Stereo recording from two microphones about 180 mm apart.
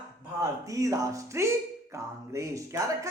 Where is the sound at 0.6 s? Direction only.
20° right (ahead or behind).